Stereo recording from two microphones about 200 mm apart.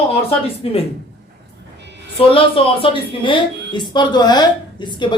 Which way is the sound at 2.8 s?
25° left (ahead or behind).